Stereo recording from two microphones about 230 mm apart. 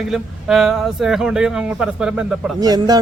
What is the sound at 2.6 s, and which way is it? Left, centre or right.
Speech, centre.